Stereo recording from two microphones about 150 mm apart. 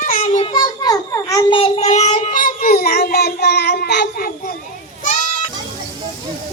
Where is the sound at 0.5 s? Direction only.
30° left (ahead or behind); by 4.3 s 90° left.